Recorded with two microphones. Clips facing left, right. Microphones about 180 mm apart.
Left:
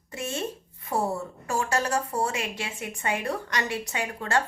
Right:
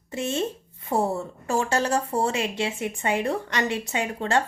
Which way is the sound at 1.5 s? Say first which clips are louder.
Right 3 dB; 25° right (ahead or behind).